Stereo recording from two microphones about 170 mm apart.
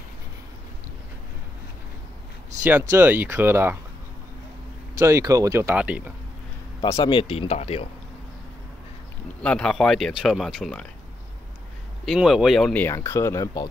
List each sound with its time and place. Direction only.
2.9 s speech: 10° right (ahead or behind)
4.9 s speech: 20° right (ahead or behind)
6.8 s speech: 30° left (ahead or behind)
9.4 s speech: 5° left (ahead or behind)
12.1 s speech: 5° right (ahead or behind)
12.8 s speech: 15° left (ahead or behind)